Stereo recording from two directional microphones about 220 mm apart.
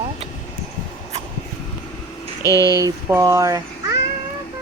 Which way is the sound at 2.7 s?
15° right (ahead or behind).